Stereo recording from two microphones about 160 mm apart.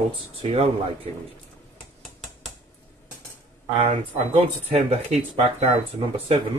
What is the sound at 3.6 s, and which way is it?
Speech, 30° right (ahead or behind).